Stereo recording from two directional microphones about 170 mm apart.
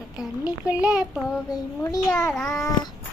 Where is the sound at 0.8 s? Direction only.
5° right (ahead or behind).